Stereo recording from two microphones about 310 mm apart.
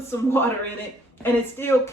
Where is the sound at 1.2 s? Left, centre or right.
Centre.